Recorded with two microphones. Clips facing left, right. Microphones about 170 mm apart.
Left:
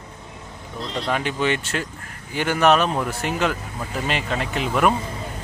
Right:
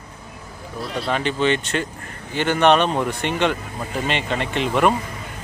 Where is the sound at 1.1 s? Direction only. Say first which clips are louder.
Right 3 dB; 10° left (ahead or behind).